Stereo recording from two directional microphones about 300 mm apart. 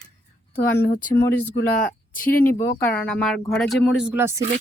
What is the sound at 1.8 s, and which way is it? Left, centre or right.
Speech, left.